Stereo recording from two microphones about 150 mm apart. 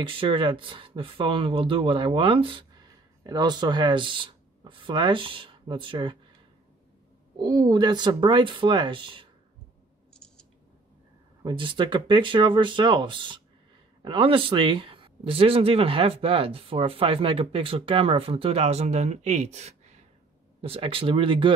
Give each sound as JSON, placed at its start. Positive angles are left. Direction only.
{"t": 0.0, "sound": "speech", "side_deg": -35}
{"t": 7.3, "sound": "speech", "side_deg": -30}
{"t": 10.1, "sound": "scissors", "side_deg": 5}
{"t": 11.4, "sound": "speech", "side_deg": -30}